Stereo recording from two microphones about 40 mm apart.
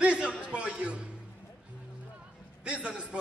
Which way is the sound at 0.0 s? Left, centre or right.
Right.